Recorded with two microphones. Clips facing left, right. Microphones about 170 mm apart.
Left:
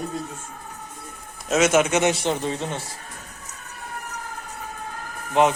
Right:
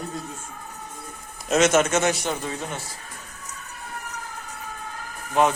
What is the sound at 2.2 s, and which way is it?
Speech, 25° left (ahead or behind).